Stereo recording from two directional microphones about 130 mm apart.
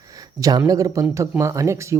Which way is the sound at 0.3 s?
25° right (ahead or behind).